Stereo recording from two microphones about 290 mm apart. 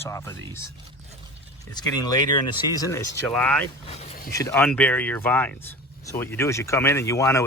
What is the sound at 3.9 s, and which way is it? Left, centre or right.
Speech, left.